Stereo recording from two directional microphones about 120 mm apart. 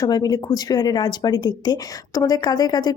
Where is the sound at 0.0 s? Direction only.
35° left (ahead or behind).